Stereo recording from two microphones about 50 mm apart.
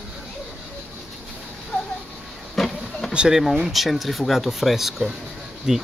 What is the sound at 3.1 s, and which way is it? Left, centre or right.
Speech, centre.